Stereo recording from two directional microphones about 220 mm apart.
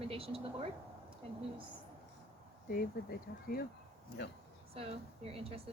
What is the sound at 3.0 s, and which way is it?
Speech, 45° left (ahead or behind).